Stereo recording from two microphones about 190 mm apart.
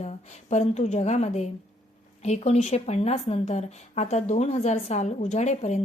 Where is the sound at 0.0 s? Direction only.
35° left (ahead or behind).